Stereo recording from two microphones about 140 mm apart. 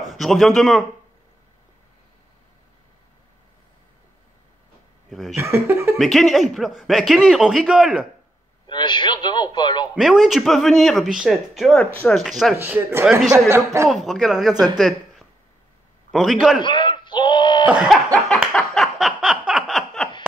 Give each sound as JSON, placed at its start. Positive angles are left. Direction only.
{"t": 0.1, "sound": "speech", "side_deg": 0}
{"t": 5.1, "sound": "a man's voice", "side_deg": 0}
{"t": 5.4, "sound": "speech", "side_deg": -20}
{"t": 5.9, "sound": "a man's voice", "side_deg": 0}
{"t": 8.6, "sound": "a man's voice", "side_deg": 35}
{"t": 9.9, "sound": "a man's voice", "side_deg": -5}
{"t": 12.5, "sound": "speech", "side_deg": -15}
{"t": 13.8, "sound": "a man's voice", "side_deg": 0}
{"t": 14.8, "sound": "a sound", "side_deg": 0}
{"t": 16.1, "sound": "a man's voice", "side_deg": 0}
{"t": 16.6, "sound": "a sound", "side_deg": 35}
{"t": 17.6, "sound": "cough", "side_deg": -5}
{"t": 18.5, "sound": "a sound", "side_deg": 5}